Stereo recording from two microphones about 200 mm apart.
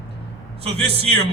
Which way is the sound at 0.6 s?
30° right (ahead or behind).